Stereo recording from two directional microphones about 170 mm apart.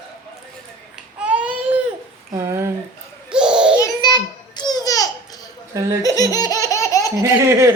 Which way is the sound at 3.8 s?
25° left (ahead or behind).